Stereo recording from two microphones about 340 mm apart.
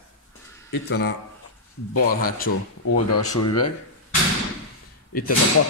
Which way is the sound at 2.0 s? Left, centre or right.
Left.